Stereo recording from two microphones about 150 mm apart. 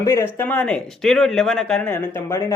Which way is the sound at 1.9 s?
15° left (ahead or behind).